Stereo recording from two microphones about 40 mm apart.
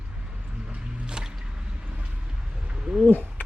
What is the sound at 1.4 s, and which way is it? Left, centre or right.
Drip, right.